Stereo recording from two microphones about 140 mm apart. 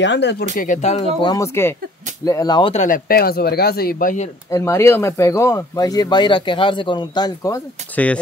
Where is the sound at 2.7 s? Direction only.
65° left (ahead or behind).